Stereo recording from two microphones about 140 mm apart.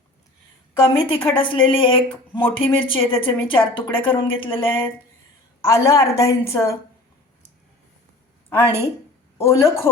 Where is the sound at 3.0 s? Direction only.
40° left (ahead or behind).